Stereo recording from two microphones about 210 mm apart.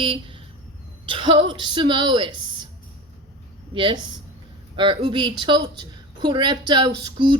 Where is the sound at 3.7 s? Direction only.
25° right (ahead or behind).